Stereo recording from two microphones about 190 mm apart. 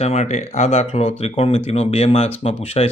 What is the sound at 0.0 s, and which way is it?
Speech, 35° left (ahead or behind).